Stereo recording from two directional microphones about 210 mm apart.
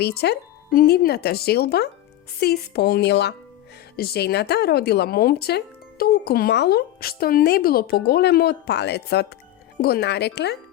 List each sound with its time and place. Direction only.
0.0 s speech: 50° left (ahead or behind)